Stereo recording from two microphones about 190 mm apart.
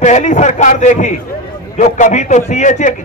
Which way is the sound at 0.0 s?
40° left (ahead or behind).